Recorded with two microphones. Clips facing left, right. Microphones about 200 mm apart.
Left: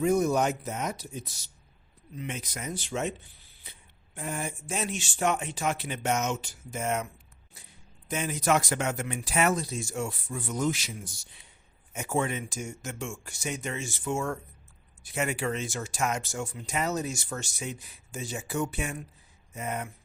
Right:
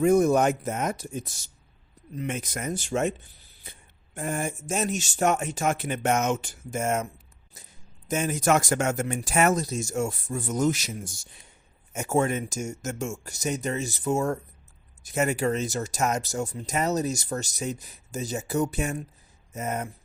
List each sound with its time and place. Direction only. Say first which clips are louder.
0.0 s speech: right 5 dB; 50° right (ahead or behind)